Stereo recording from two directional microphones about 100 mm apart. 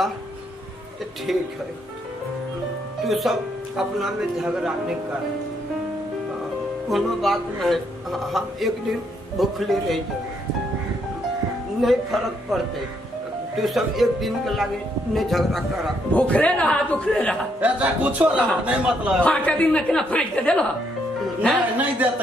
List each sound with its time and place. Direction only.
1.3 s speech: centre (ahead or behind)
3.1 s speech: centre (ahead or behind)
6.9 s speech: centre (ahead or behind)
11.8 s speech: centre (ahead or behind)
13.6 s speech: centre (ahead or behind)
16.1 s a woman's voice: 15° left (ahead or behind)
17.6 s speech: 15° right (ahead or behind)
19.2 s a woman's voice: 15° left (ahead or behind)
21.7 s speech: 15° right (ahead or behind)